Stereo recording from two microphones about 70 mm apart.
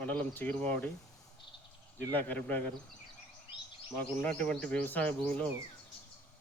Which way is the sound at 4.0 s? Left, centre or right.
Centre.